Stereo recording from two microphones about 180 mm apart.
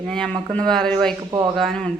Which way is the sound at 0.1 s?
5° left (ahead or behind).